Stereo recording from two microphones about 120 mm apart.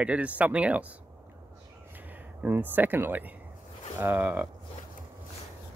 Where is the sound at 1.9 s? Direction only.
15° right (ahead or behind).